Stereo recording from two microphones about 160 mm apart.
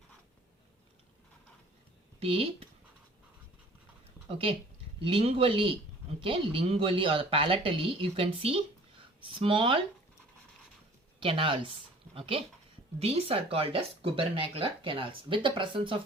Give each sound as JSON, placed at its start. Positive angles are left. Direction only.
{"t": 2.1, "sound": "speech", "side_deg": -35}
{"t": 4.3, "sound": "speech", "side_deg": -35}
{"t": 11.2, "sound": "speech", "side_deg": -35}